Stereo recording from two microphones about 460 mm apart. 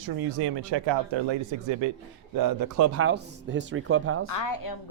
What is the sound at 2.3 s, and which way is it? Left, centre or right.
Speech, right.